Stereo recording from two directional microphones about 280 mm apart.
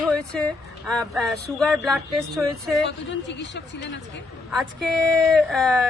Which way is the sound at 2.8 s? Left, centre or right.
Left.